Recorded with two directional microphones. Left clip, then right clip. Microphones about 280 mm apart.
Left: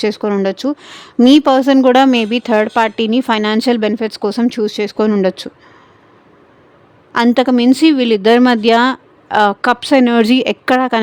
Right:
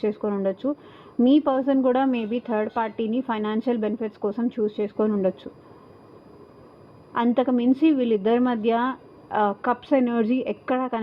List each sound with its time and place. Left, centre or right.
0.0 s speech: left
7.1 s speech: left